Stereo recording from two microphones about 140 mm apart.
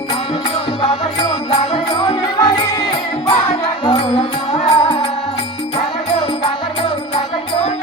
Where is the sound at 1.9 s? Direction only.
30° left (ahead or behind).